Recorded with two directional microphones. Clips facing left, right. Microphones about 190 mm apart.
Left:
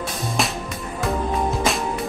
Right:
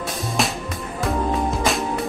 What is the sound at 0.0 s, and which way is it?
Music, centre (ahead or behind).